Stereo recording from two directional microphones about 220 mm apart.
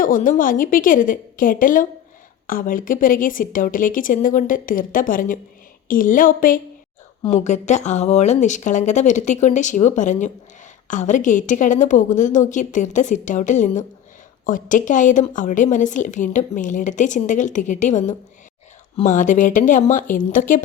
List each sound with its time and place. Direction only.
0.0 s a woman's voice: 40° left (ahead or behind)